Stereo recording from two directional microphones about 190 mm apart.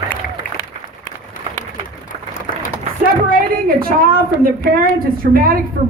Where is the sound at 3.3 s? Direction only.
50° right (ahead or behind).